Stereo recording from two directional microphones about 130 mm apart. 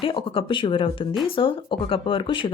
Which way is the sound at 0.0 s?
45° left (ahead or behind).